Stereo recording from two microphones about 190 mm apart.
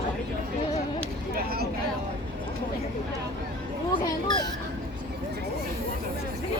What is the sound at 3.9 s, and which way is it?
Children playing, 20° left (ahead or behind).